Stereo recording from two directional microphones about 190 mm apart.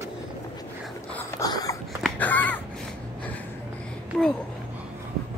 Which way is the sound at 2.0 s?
10° left (ahead or behind).